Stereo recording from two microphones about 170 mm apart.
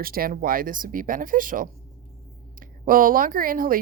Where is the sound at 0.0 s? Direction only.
60° right (ahead or behind).